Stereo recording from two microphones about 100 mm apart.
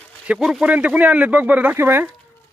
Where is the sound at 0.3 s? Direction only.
5° right (ahead or behind); by 2.0 s 25° right (ahead or behind).